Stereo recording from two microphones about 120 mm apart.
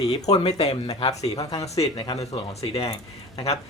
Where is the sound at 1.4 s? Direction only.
30° left (ahead or behind).